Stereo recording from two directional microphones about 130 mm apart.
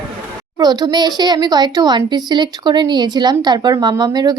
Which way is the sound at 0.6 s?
30° right (ahead or behind).